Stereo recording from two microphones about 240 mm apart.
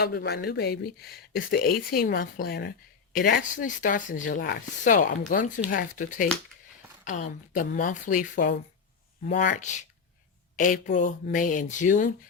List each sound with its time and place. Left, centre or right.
0.0 s speech: left